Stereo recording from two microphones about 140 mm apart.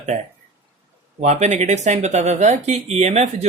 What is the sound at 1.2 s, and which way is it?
Speech, 55° right (ahead or behind).